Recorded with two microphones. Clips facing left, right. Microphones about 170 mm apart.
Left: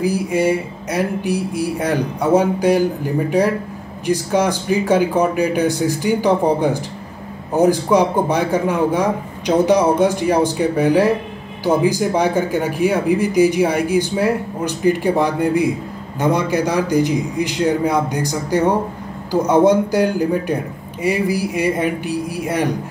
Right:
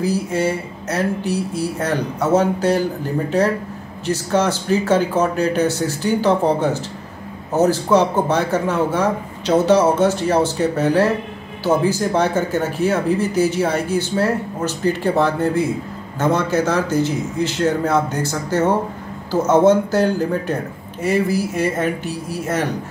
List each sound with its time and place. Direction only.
0.0 s speech: 10° left (ahead or behind)